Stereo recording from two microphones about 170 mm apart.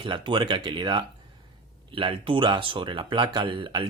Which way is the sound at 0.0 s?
30° right (ahead or behind).